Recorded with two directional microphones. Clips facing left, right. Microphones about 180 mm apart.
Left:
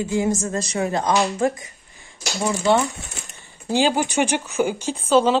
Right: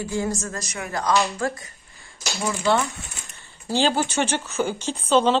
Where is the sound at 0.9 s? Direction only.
20° left (ahead or behind).